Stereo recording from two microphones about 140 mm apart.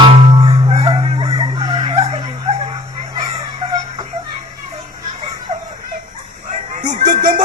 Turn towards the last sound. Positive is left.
turn(degrees=-60)  # may be behind; listen again after turning